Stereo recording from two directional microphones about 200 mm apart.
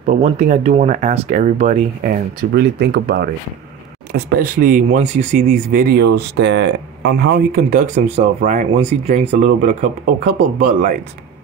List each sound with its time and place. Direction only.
0.0 s speech: 35° right (ahead or behind)
2.5 s speech: 55° right (ahead or behind)